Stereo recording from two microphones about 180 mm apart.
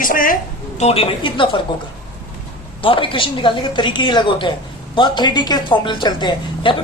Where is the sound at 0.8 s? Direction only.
35° left (ahead or behind).